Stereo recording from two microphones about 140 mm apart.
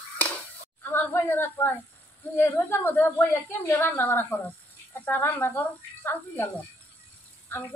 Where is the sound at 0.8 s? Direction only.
15° left (ahead or behind).